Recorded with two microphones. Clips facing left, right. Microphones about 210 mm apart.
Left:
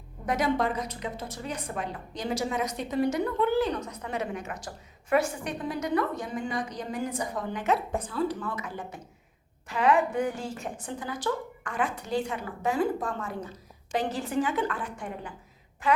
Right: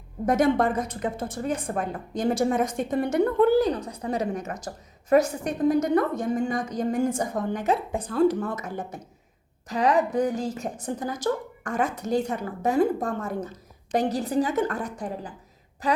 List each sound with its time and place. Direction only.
0.3 s a woman's voice: 50° right (ahead or behind)
3.4 s a woman's voice: 40° right (ahead or behind)